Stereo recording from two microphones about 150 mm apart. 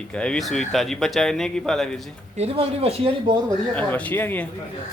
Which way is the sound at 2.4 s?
40° right (ahead or behind).